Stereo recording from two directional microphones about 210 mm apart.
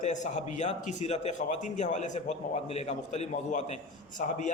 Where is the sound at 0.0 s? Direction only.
35° left (ahead or behind).